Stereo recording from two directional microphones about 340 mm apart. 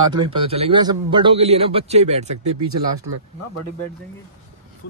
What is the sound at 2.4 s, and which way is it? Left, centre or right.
Speech, right.